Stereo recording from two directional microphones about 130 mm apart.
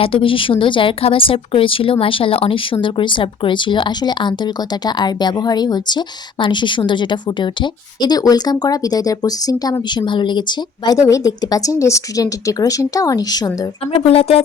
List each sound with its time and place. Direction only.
0.0 s a woman's voice: 45° left (ahead or behind)
14.0 s speech: 45° left (ahead or behind)